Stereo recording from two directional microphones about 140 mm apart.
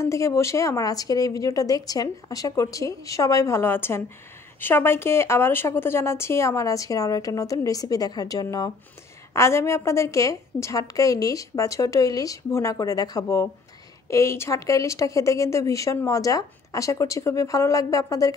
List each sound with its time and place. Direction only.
0.0 s speech: 20° left (ahead or behind)